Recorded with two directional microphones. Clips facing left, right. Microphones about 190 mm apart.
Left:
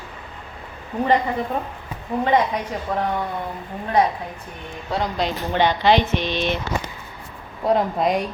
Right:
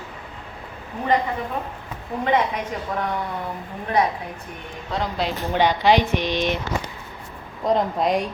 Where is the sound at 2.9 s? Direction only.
35° left (ahead or behind).